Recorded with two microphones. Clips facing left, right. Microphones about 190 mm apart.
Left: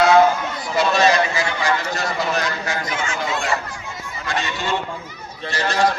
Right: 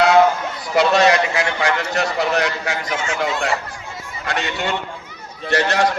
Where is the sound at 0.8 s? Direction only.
65° right (ahead or behind).